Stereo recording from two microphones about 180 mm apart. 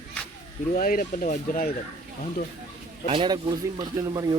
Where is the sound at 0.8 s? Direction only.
50° left (ahead or behind).